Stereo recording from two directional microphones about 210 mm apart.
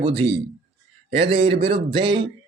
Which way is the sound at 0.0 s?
25° right (ahead or behind).